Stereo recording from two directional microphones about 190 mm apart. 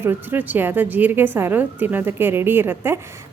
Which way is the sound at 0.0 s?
10° right (ahead or behind).